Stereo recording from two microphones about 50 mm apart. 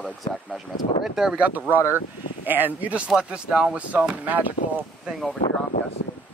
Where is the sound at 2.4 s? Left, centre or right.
Right.